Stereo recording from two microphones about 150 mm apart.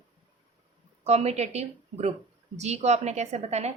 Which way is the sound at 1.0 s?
45° right (ahead or behind).